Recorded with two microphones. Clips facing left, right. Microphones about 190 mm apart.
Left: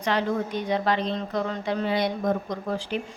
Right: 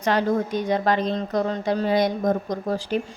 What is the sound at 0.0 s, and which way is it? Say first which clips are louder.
A woman's voice: right 4 dB; 45° right (ahead or behind).